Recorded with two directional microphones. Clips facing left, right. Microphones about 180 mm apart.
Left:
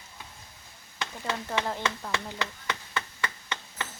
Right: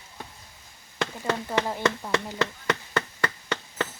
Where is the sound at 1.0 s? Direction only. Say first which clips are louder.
Right 6 dB; 55° right (ahead or behind).